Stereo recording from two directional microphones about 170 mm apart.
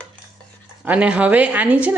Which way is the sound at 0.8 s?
10° right (ahead or behind).